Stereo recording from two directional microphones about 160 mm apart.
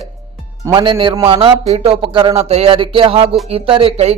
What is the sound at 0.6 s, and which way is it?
Speech, 30° right (ahead or behind).